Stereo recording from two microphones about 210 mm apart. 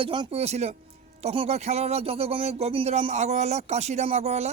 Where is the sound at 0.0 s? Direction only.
25° right (ahead or behind).